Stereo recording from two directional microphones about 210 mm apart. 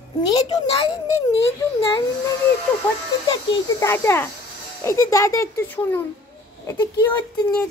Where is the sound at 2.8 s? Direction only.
10° left (ahead or behind).